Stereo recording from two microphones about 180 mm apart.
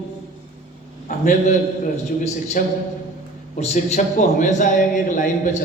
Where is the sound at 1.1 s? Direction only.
45° left (ahead or behind).